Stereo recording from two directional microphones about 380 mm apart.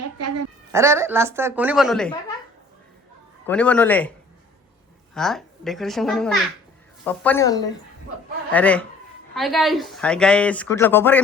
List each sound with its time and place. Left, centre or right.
0.2 s a sound: right
0.7 s a woman's voice: centre
3.4 s speech: centre
5.1 s speech: centre